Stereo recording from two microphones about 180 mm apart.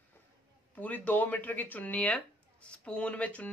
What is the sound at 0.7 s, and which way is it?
Speech, 10° left (ahead or behind).